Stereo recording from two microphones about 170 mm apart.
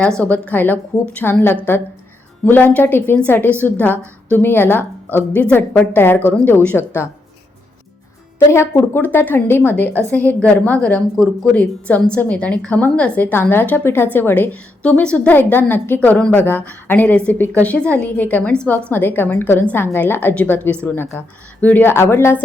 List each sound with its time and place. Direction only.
0.2 s a woman's voice: 10° left (ahead or behind)
8.5 s a woman's voice: 15° left (ahead or behind)